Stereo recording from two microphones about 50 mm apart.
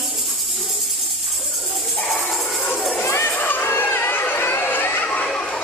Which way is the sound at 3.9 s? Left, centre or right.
Left.